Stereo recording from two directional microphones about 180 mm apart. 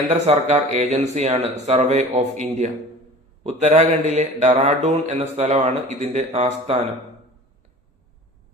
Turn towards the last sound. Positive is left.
turn(degrees=-35)  # may be behind; listen again after turning